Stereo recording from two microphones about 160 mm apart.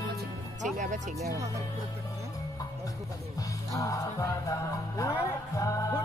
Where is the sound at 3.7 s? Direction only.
20° left (ahead or behind).